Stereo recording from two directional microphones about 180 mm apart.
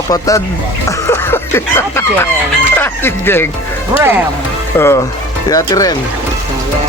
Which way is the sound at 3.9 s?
15° right (ahead or behind).